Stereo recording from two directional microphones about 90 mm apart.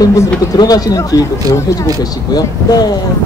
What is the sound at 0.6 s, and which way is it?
Speech, 45° left (ahead or behind).